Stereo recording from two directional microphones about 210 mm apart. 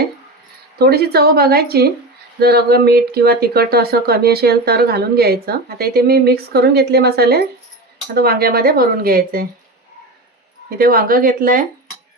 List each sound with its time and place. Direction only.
0.8 s speech: 50° right (ahead or behind)
10.8 s speech: 45° right (ahead or behind)